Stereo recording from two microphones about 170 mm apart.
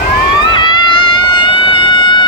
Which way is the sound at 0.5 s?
25° left (ahead or behind).